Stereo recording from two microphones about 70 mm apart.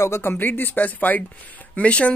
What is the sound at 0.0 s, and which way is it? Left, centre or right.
Speech, left.